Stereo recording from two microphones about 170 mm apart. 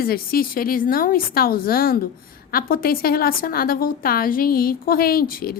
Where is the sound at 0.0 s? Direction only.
60° left (ahead or behind).